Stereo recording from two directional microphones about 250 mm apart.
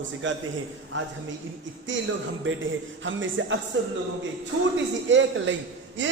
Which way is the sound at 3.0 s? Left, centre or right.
Right.